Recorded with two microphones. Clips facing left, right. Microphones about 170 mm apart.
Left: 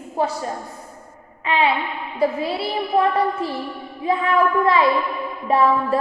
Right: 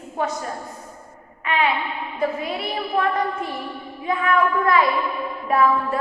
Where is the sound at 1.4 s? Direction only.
30° left (ahead or behind).